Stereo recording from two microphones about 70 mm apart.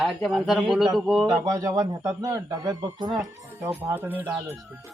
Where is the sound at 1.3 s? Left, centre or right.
Right.